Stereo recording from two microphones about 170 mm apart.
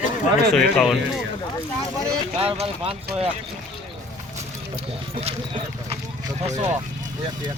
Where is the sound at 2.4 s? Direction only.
35° right (ahead or behind).